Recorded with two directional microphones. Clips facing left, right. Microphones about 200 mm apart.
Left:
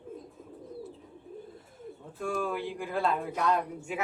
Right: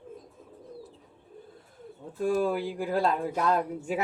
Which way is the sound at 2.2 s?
35° right (ahead or behind).